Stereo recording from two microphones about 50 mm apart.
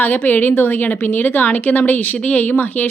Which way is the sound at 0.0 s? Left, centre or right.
Left.